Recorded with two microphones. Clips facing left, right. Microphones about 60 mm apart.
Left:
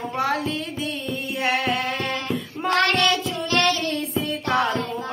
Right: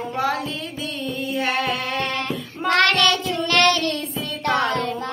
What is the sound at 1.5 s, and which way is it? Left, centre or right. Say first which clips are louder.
Child singing: left 4 dB; right.